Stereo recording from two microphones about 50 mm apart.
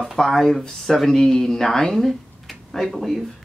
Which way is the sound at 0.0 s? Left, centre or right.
Centre.